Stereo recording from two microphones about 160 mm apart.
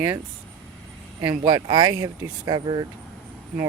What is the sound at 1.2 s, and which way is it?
Speech, 30° right (ahead or behind).